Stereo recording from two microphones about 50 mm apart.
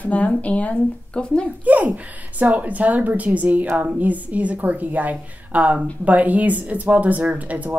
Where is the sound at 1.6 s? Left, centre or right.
Right.